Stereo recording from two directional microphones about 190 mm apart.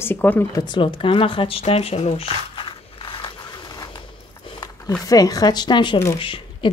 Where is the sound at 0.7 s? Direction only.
25° left (ahead or behind).